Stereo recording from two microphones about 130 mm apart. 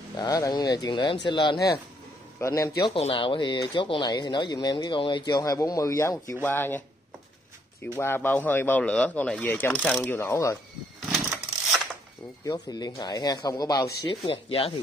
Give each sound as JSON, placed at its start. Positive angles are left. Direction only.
{"t": 0.2, "sound": "speech", "side_deg": 30}
{"t": 2.4, "sound": "speech", "side_deg": 25}
{"t": 2.9, "sound": "speech", "side_deg": 45}
{"t": 7.8, "sound": "speech", "side_deg": 15}
{"t": 10.0, "sound": "speech", "side_deg": 20}
{"t": 11.0, "sound": "a sound", "side_deg": 0}
{"t": 12.4, "sound": "speech", "side_deg": 30}
{"t": 14.2, "sound": "speech", "side_deg": 50}